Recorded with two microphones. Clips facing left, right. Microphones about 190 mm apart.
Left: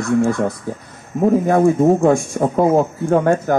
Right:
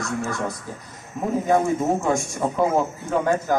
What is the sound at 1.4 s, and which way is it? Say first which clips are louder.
Speech: left 5 dB; 60° left (ahead or behind).